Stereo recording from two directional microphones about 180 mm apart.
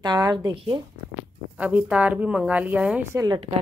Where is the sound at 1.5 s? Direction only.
5° right (ahead or behind).